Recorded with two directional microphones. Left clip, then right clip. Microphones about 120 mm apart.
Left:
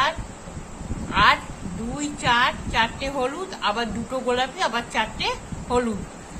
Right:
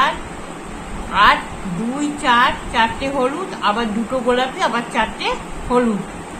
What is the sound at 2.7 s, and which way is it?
A woman's voice, 40° left (ahead or behind).